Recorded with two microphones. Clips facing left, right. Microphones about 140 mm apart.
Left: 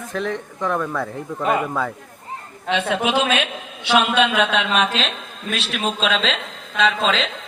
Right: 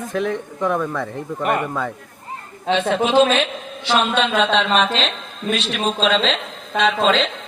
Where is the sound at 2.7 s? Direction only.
10° left (ahead or behind).